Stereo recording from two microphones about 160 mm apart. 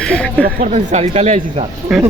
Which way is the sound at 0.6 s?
45° right (ahead or behind).